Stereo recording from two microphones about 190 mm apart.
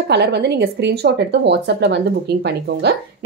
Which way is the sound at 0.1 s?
65° right (ahead or behind).